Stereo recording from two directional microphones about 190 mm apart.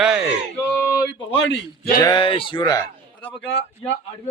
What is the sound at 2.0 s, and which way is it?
Speech, 25° left (ahead or behind).